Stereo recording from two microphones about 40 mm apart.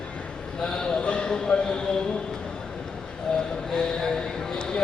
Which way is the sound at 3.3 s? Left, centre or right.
Left.